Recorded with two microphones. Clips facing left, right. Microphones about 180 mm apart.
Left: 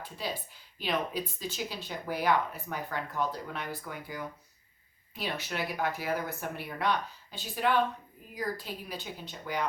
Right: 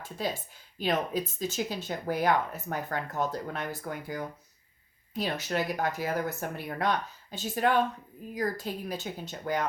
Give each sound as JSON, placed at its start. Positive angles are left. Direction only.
{"t": 0.0, "sound": "speech", "side_deg": -45}